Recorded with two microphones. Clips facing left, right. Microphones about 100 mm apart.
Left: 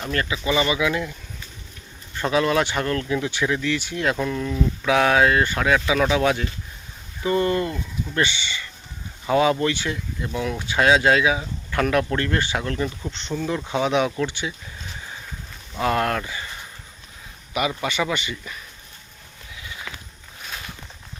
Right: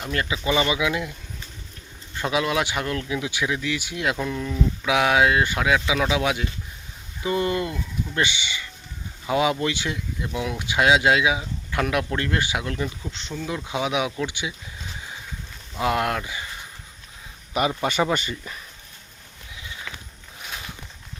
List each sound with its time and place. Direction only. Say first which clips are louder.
0.0 s speech: left 1 dB; 15° right (ahead or behind)
2.1 s speech: left 3 dB; 10° right (ahead or behind)
15.8 s speech: left 1 dB; 10° right (ahead or behind)
17.8 s speech: right 2 dB; 45° right (ahead or behind)
19.9 s a sound: even; 5° left (ahead or behind)
20.4 s a sound: even; 10° right (ahead or behind)